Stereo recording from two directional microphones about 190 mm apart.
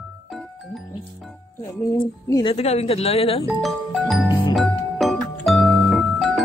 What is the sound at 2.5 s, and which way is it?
Speech, 35° left (ahead or behind).